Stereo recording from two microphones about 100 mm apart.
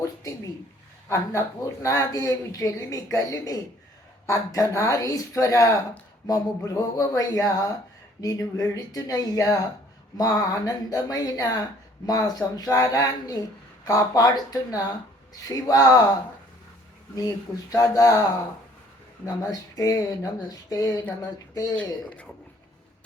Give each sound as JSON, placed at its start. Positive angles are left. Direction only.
{"t": 1.0, "sound": "speech", "side_deg": 30}
{"t": 17.2, "sound": "speech", "side_deg": 35}